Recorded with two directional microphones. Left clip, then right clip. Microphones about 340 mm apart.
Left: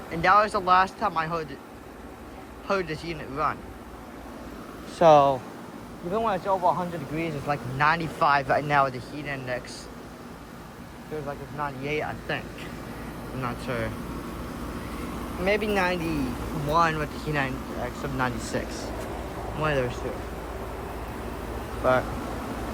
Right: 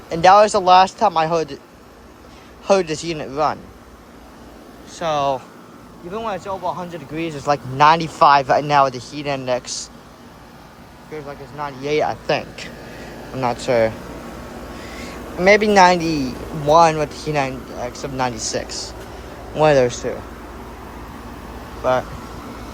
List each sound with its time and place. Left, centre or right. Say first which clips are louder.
0.1 s speech: right 9 dB; centre
2.6 s speech: right 11 dB; centre
4.9 s speech: left 3 dB; centre
7.2 s speech: right 9 dB; centre
11.6 s speech: right 10 dB; centre
15.4 s speech: right 13 dB; centre
19.6 s speech: right 13 dB; centre
21.8 s speech: right 4 dB; centre